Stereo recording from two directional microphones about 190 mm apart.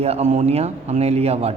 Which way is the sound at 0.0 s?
35° right (ahead or behind).